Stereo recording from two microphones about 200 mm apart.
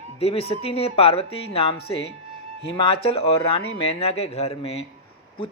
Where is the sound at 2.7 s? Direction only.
25° left (ahead or behind).